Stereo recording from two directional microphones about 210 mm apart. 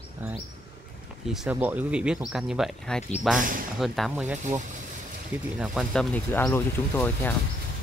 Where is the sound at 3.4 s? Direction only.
40° right (ahead or behind).